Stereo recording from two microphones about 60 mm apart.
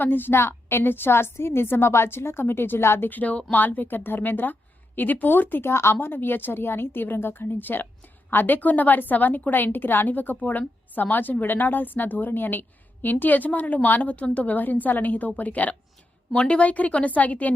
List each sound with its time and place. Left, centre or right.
0.0 s a woman's voice: left